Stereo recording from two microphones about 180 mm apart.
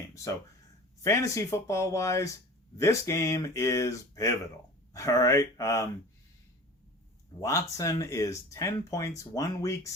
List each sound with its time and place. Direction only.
1.0 s speech: 15° left (ahead or behind)
7.4 s speech: 20° left (ahead or behind)